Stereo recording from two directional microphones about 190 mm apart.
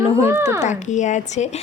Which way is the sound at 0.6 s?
40° left (ahead or behind).